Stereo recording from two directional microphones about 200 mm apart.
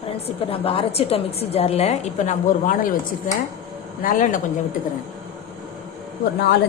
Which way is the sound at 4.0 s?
40° left (ahead or behind).